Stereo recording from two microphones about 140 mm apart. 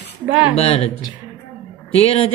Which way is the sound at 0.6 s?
45° left (ahead or behind).